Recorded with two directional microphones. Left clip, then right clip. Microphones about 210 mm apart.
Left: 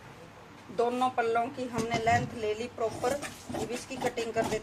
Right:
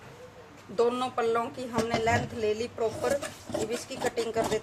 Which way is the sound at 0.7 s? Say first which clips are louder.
Right 1 dB; 30° right (ahead or behind).